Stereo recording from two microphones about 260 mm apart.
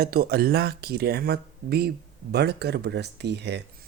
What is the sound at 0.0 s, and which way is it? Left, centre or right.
Speech, right.